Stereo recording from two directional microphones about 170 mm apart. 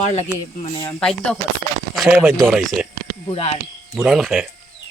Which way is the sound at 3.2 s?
35° left (ahead or behind).